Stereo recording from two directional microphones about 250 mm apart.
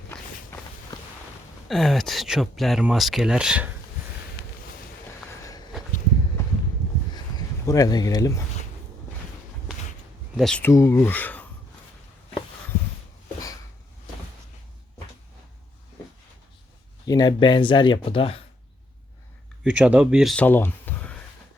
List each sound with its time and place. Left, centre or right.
0.5 s walk: centre
1.6 s speech: centre
7.3 s speech: centre
10.3 s speech: centre
17.1 s speech: centre
19.6 s speech: centre